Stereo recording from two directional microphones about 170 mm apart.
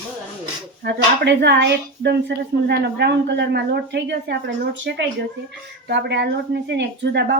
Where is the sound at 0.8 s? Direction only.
85° right.